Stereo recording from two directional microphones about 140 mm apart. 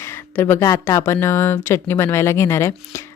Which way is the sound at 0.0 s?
15° left (ahead or behind).